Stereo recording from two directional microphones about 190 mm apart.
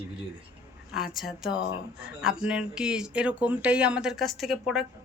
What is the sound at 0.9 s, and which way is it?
Speech, centre (ahead or behind).